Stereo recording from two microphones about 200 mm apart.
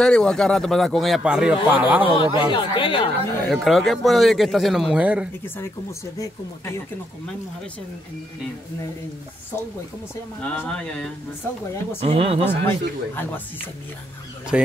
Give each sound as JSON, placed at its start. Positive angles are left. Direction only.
{"t": 0.0, "sound": "a man's voice", "side_deg": 5}
{"t": 2.1, "sound": "speech", "side_deg": 25}
{"t": 3.4, "sound": "a man's voice", "side_deg": 0}
{"t": 5.4, "sound": "speech", "side_deg": 15}
{"t": 10.4, "sound": "a man's voice", "side_deg": 5}
{"t": 12.0, "sound": "speech", "side_deg": -30}
{"t": 12.4, "sound": "speech", "side_deg": 10}
{"t": 14.5, "sound": "a man's voice", "side_deg": -5}